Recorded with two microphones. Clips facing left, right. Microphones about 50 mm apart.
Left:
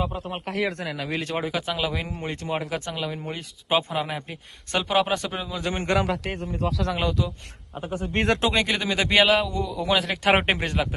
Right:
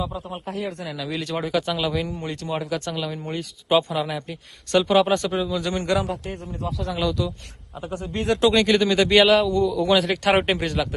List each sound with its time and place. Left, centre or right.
0.3 s speech: left
1.0 s a man's voice: left
1.4 s a man's voice: centre
2.2 s speech: left
2.6 s a man's voice: centre
3.7 s speech: left
4.7 s speech: centre
5.5 s a man's voice: left
6.0 s a man's voice: left
7.0 s speech: left
8.0 s speech: left
8.4 s a man's voice: centre
10.0 s speech: centre
10.3 s speech: left